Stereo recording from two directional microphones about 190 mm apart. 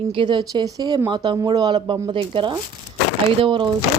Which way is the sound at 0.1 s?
25° right (ahead or behind).